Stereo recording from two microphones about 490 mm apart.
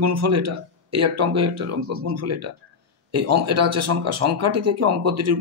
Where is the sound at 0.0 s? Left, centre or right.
Right.